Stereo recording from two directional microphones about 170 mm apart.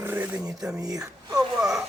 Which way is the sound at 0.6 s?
20° right (ahead or behind).